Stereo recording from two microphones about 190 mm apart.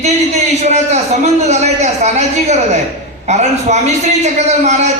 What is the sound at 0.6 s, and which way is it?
A man's voice, 35° right (ahead or behind).